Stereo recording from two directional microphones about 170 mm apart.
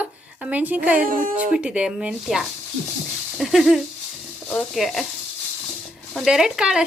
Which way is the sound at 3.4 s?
Centre (ahead or behind).